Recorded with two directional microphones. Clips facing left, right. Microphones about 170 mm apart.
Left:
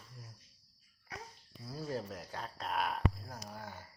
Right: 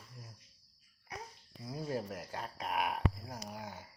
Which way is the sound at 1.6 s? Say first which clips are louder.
Right 2 dB; 15° right (ahead or behind).